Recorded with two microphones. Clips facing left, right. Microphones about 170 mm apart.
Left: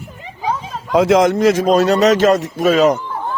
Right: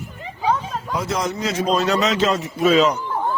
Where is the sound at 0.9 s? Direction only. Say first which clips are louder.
Left 13 dB; 90° left.